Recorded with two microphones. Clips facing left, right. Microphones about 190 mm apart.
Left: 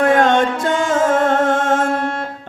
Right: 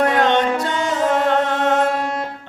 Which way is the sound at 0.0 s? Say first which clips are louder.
Left 3 dB; 50° left (ahead or behind).